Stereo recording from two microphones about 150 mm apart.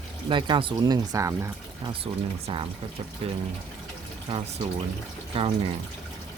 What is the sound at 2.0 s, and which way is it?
Speech, 35° right (ahead or behind).